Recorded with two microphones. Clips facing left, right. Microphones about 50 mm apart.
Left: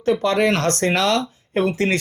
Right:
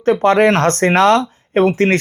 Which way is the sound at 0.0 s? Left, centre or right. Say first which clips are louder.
Right 6 dB; right.